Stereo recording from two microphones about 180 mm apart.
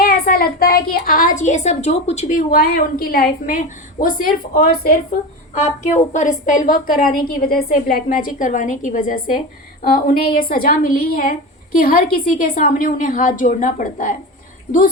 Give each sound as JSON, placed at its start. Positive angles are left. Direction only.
{"t": 0.0, "sound": "a woman's voice", "side_deg": 55}